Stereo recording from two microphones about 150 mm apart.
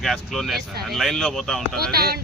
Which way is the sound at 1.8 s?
90° right.